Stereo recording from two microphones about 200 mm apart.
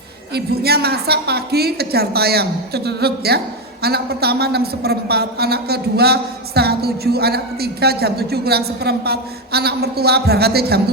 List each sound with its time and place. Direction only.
0.3 s a woman's voice: 50° right (ahead or behind)